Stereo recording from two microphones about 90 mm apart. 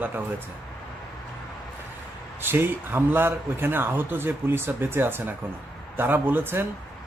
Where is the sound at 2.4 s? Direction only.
25° right (ahead or behind).